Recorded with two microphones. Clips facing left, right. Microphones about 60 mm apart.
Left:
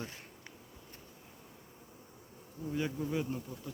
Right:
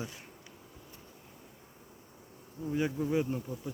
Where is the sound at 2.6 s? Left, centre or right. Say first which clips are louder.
Right 4 dB; centre.